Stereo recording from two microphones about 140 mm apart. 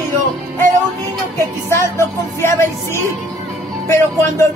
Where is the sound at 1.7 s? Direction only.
20° left (ahead or behind).